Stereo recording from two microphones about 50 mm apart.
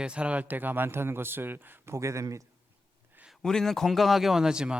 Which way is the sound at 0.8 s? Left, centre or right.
Right.